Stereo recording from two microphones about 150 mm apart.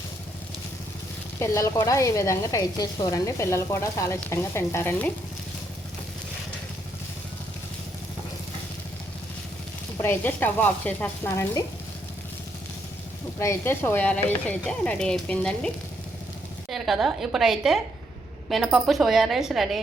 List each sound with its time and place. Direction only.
1.4 s speech: 20° left (ahead or behind)
10.0 s speech: 15° left (ahead or behind)
11.3 s speech: 20° left (ahead or behind)
13.4 s a woman's voice: 15° left (ahead or behind); by 19.8 s centre (ahead or behind)